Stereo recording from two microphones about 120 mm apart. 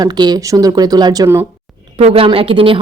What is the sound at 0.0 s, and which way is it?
Speech, 35° right (ahead or behind).